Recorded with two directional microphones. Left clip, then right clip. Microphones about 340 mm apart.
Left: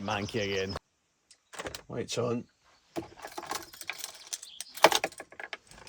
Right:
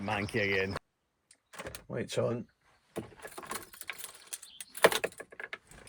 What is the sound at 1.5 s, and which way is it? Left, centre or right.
Power windows, left.